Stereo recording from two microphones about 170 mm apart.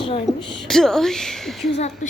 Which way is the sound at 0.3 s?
Centre (ahead or behind).